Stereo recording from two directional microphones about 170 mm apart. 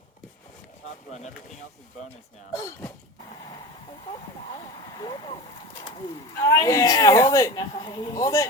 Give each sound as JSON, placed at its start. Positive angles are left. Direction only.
{"t": 2.5, "sound": "speech", "side_deg": 20}
{"t": 4.9, "sound": "speech", "side_deg": 25}
{"t": 6.5, "sound": "speech", "side_deg": 20}